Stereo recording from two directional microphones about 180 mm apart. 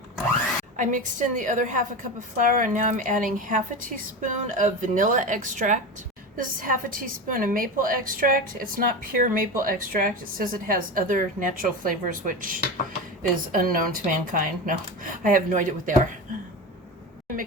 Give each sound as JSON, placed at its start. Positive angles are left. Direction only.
{"t": 0.8, "sound": "a woman's voice", "side_deg": -45}